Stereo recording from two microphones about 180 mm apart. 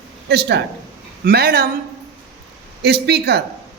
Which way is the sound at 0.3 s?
65° right (ahead or behind).